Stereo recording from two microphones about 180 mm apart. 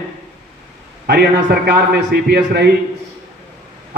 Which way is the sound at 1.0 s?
65° right (ahead or behind).